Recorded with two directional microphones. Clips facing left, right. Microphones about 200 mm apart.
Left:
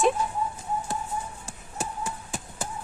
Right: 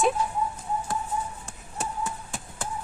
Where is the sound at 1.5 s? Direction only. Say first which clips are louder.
Even; 5° left (ahead or behind).